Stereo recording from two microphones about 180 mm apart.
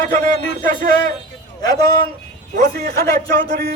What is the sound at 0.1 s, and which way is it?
Speech, 50° right (ahead or behind).